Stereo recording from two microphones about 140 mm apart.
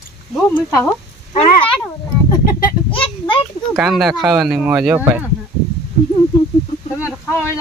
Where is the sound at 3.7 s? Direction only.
Centre (ahead or behind).